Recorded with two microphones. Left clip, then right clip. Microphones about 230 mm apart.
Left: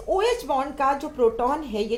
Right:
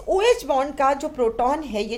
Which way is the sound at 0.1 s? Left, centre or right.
Right.